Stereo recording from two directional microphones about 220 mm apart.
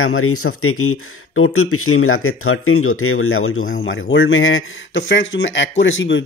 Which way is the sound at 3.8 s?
55° left (ahead or behind).